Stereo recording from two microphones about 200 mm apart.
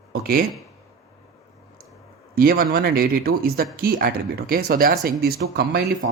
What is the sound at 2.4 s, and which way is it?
Speech, 45° right (ahead or behind).